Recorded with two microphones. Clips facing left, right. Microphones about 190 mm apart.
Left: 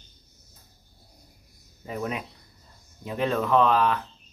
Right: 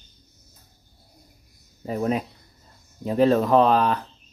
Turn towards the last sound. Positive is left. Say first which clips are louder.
# right 3 dB
turn(degrees=-35)  # may be behind; listen again after turning